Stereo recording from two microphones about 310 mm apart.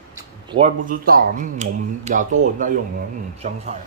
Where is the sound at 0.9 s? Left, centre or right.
Right.